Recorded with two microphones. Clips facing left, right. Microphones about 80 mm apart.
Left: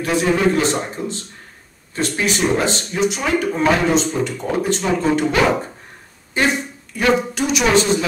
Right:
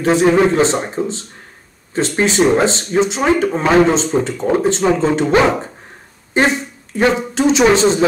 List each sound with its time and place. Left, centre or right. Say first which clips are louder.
0.0 s speech: right 5 dB; right
2.2 s speech: right 6 dB; right